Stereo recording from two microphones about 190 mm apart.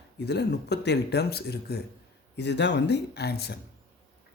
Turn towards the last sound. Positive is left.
turn(degrees=60)  # may be behind; listen again after turning